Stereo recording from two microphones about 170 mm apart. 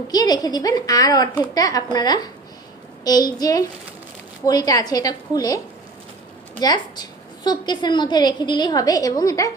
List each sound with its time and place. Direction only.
0.1 s a woman's voice: 20° left (ahead or behind)
6.6 s a woman's voice: 25° left (ahead or behind)